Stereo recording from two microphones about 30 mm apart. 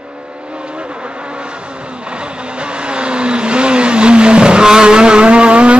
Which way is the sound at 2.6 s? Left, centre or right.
Right.